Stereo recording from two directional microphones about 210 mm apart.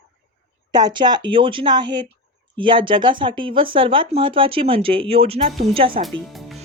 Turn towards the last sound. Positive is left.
turn(degrees=0)  # may be behind; listen again after turning